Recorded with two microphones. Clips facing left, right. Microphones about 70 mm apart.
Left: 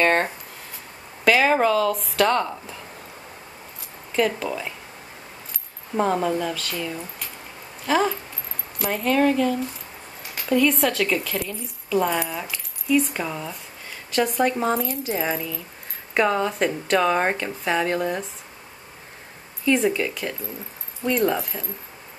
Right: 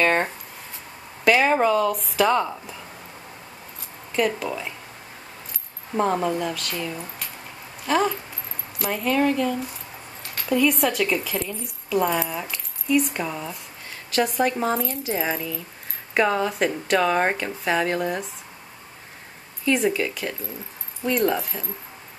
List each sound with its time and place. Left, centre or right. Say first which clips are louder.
0.0 s a sound: left 1 dB; centre
1.2 s speech: even; centre
4.1 s speech: left 1 dB; centre
5.9 s speech: left 1 dB; centre
19.6 s speech: left 1 dB; centre